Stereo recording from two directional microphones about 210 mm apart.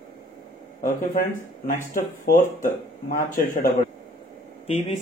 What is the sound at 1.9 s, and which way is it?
Speech, 40° left (ahead or behind).